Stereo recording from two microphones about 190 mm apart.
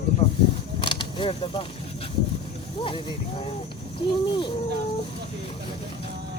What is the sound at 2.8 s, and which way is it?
Speech, 25° left (ahead or behind).